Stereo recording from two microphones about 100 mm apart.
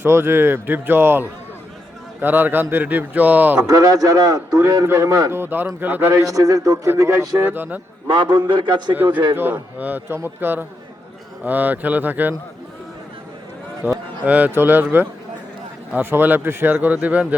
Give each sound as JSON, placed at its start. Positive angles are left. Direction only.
{"t": 0.0, "sound": "speech", "side_deg": -25}
{"t": 3.6, "sound": "a man's voice", "side_deg": -35}
{"t": 6.2, "sound": "a man's voice", "side_deg": -35}
{"t": 7.3, "sound": "speech", "side_deg": -20}
{"t": 8.0, "sound": "a man's voice", "side_deg": -50}
{"t": 9.3, "sound": "speech", "side_deg": -20}
{"t": 13.8, "sound": "speech", "side_deg": -20}